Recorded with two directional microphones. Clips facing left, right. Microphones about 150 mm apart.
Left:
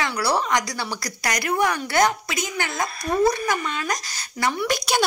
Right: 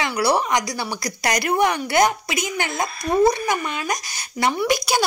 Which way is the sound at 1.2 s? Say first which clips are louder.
Right 3 dB; 25° right (ahead or behind).